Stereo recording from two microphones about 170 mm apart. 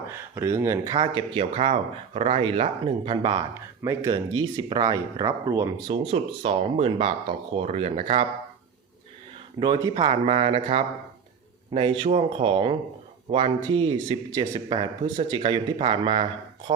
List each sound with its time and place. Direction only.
0.1 s speech: 15° right (ahead or behind)
0.9 s speech: 30° right (ahead or behind)
5.9 s speech: 35° right (ahead or behind)
9.6 s speech: 25° right (ahead or behind)